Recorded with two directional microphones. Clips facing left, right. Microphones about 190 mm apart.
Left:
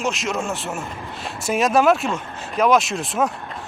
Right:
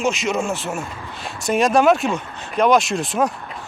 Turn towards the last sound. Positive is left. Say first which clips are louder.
# right 1 dB
turn(degrees=0)  # may be behind; listen again after turning